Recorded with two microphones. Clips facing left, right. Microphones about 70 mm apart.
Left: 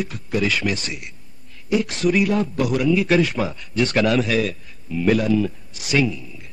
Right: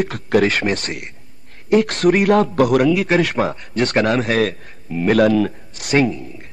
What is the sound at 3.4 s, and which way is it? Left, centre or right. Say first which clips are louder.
Speech: right 3 dB; right.